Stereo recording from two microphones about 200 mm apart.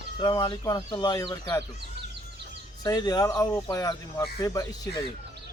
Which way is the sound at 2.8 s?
20° left (ahead or behind).